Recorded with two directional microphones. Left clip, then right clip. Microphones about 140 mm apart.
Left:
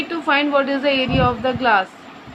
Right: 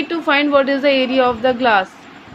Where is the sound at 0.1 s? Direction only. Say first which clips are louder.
Right 3 dB; 35° right (ahead or behind).